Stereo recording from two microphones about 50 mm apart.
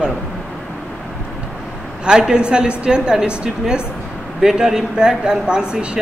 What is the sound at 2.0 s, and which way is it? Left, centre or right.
A man's voice, centre.